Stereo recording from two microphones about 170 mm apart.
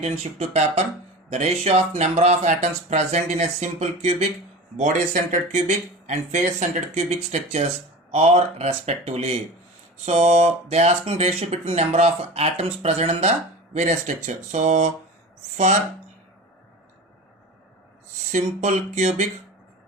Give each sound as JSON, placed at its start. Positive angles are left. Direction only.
{"t": 0.0, "sound": "speech", "side_deg": -40}
{"t": 18.3, "sound": "speech", "side_deg": -45}